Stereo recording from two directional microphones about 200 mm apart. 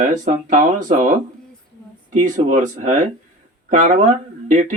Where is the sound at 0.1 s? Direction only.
40° right (ahead or behind).